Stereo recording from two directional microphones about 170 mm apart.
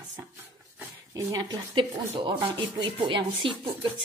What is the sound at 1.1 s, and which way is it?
Speech, 25° right (ahead or behind).